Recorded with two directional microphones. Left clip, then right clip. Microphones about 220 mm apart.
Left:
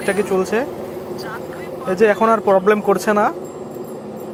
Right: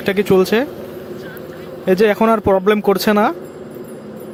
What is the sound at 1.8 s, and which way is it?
Speech, 40° right (ahead or behind).